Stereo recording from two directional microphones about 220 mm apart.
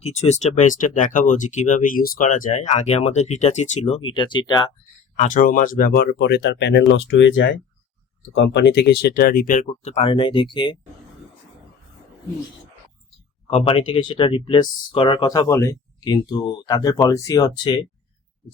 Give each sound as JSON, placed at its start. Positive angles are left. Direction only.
{"t": 0.0, "sound": "speech", "side_deg": 30}
{"t": 5.1, "sound": "speech", "side_deg": 35}
{"t": 13.5, "sound": "speech", "side_deg": 25}